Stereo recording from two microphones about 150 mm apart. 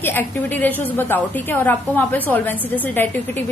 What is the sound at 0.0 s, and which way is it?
A woman's voice, 15° left (ahead or behind).